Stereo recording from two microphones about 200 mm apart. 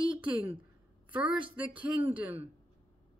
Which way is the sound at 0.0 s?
5° right (ahead or behind).